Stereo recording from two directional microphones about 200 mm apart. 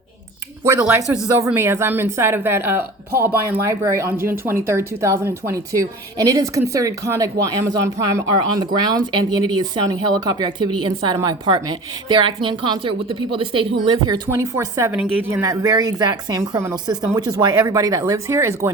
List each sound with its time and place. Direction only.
0.6 s a woman's voice: 10° right (ahead or behind)